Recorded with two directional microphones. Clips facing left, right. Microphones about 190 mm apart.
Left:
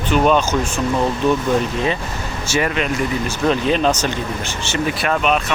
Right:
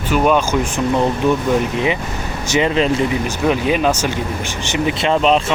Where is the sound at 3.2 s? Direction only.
10° right (ahead or behind); by 5.5 s 25° right (ahead or behind).